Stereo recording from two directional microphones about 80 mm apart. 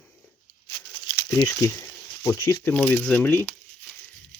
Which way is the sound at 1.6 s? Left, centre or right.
Left.